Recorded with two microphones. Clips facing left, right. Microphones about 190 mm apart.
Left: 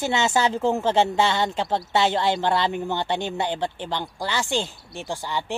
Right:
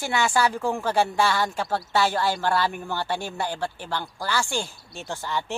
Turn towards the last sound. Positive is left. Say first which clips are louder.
# left 1 dB
turn(degrees=15)  # may be behind; listen again after turning